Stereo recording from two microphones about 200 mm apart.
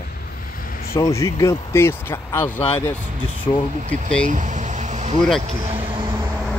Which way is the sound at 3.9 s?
5° left (ahead or behind).